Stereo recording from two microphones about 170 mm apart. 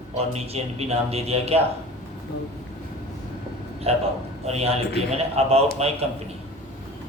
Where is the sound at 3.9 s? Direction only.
35° right (ahead or behind).